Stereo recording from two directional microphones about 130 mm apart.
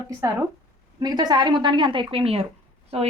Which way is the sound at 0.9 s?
30° right (ahead or behind).